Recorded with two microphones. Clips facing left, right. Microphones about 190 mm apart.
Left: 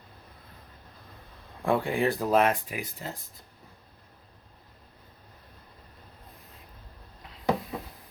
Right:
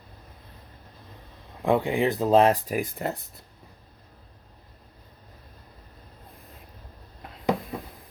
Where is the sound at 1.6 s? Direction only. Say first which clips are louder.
Right 3 dB; 20° right (ahead or behind).